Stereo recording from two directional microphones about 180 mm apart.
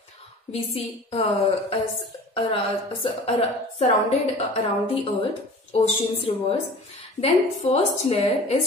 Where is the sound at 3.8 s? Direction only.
35° left (ahead or behind).